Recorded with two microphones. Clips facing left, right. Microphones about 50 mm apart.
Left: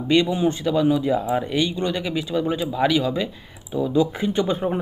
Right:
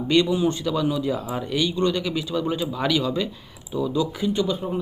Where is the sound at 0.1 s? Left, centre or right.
Left.